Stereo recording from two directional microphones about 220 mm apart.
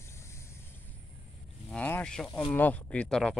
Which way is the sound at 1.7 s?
5° left (ahead or behind).